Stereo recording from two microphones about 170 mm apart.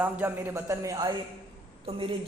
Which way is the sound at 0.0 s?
10° right (ahead or behind).